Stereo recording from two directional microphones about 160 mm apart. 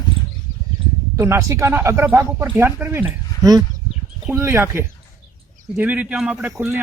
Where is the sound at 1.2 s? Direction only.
20° right (ahead or behind).